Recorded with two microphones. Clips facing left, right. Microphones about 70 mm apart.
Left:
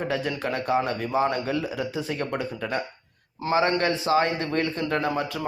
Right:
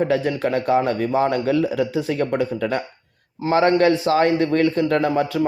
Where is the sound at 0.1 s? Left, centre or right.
Right.